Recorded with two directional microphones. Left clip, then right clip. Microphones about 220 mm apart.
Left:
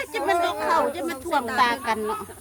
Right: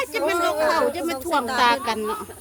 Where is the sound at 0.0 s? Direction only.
10° left (ahead or behind).